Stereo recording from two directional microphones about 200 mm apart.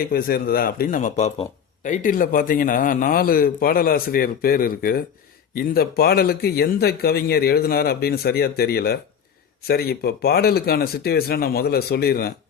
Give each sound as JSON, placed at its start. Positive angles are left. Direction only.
{"t": 0.0, "sound": "a man's voice", "side_deg": 50}